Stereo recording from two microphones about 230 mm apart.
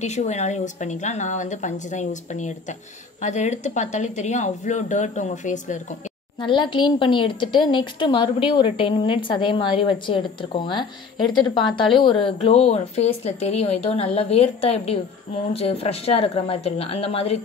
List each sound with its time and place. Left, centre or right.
0.0 s speech: left
6.4 s a woman's voice: left